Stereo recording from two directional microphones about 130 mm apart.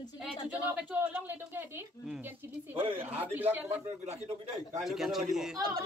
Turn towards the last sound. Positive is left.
turn(degrees=-5)  # may be behind; listen again after turning